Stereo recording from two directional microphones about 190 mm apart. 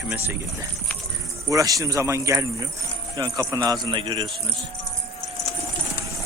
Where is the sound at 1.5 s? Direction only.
15° right (ahead or behind).